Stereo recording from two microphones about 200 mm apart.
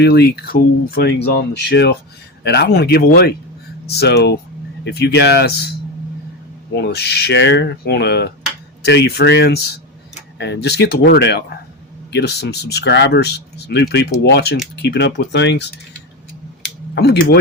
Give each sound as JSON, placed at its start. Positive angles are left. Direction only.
{"t": 0.0, "sound": "speech", "side_deg": 55}
{"t": 6.7, "sound": "speech", "side_deg": 55}
{"t": 16.9, "sound": "speech", "side_deg": 60}